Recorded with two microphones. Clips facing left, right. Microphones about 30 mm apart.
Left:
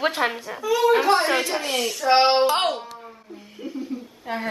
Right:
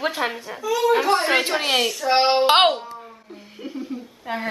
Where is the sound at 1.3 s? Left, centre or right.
Right.